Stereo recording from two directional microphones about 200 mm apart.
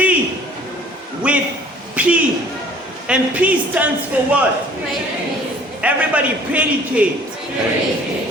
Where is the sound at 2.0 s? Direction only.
5° right (ahead or behind).